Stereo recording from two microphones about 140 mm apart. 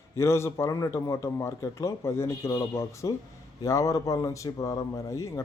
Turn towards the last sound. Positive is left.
turn(degrees=25)  # may be behind; listen again after turning